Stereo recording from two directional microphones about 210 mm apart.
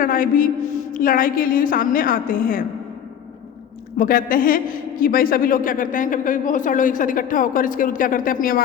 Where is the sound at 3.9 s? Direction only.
40° left (ahead or behind).